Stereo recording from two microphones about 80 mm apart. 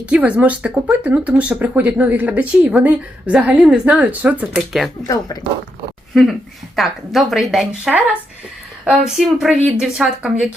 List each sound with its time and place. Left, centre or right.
0.0 s speech: centre
4.5 s a woman's voice: centre
5.0 s speech: left
6.7 s a woman's voice: centre